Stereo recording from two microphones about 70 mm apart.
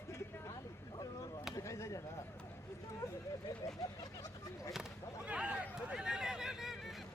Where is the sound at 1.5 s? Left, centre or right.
Left.